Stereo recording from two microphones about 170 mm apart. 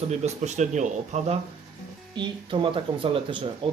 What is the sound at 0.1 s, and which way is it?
Speech, 40° right (ahead or behind).